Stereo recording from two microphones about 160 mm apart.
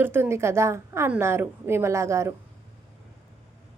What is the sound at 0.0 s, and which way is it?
A woman's voice, 15° right (ahead or behind).